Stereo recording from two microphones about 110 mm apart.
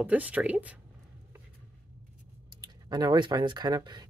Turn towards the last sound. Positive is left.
turn(degrees=-40)  # may be behind; listen again after turning